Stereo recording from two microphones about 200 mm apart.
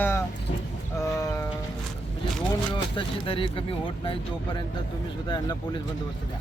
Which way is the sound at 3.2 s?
25° left (ahead or behind).